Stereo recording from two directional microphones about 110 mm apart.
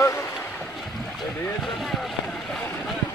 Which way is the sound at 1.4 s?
Centre (ahead or behind).